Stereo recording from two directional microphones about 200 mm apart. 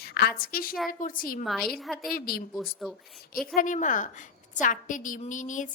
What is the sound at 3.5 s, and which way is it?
A woman's voice, 40° left (ahead or behind).